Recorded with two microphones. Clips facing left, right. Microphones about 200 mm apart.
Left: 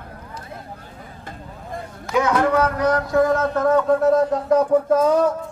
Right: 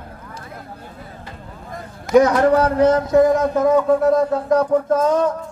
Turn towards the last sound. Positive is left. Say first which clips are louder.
# even
turn(degrees=10)  # may be behind; listen again after turning